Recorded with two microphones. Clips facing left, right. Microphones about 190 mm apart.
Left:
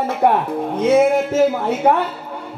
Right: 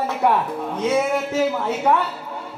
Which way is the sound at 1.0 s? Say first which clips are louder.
Left 6 dB; 50° left (ahead or behind).